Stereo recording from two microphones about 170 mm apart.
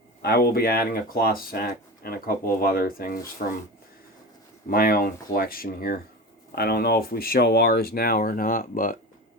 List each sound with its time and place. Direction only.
0.2 s speech: 65° left (ahead or behind)
4.7 s speech: 60° left (ahead or behind)